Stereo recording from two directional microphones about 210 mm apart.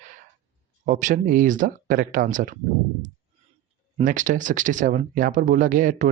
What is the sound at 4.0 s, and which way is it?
Speech, 40° right (ahead or behind).